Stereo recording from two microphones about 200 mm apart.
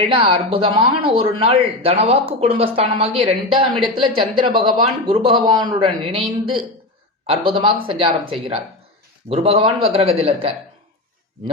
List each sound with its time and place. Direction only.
0.0 s a man's voice: 25° right (ahead or behind)